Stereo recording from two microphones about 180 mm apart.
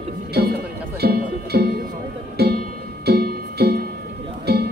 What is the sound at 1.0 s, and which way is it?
Music, 65° right (ahead or behind).